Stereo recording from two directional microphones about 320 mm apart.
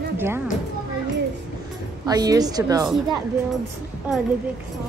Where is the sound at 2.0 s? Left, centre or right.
Centre.